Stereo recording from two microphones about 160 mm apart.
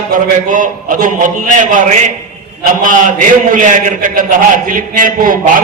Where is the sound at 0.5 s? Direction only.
55° right (ahead or behind).